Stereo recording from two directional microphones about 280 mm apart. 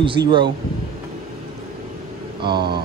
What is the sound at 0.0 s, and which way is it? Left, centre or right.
Speech, centre.